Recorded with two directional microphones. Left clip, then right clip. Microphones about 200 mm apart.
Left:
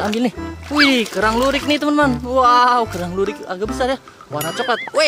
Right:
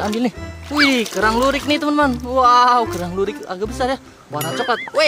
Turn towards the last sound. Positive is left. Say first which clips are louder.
# even
turn(degrees=5)  # may be behind; listen again after turning